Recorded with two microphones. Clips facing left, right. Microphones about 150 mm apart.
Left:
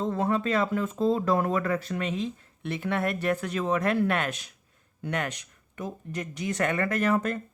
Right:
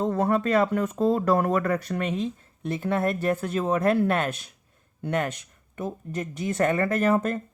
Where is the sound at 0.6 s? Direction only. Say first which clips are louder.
Right 3 dB; 40° right (ahead or behind).